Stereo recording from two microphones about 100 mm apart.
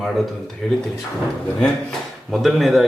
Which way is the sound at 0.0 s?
Centre (ahead or behind).